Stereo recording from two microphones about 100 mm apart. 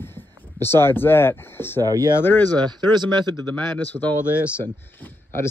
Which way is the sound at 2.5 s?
45° right (ahead or behind).